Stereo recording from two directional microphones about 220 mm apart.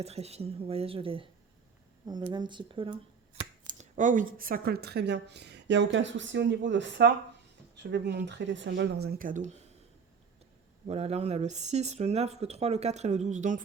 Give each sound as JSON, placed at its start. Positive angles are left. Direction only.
{"t": 0.0, "sound": "speech", "side_deg": -30}
{"t": 3.7, "sound": "speech", "side_deg": -35}
{"t": 10.8, "sound": "speech", "side_deg": -30}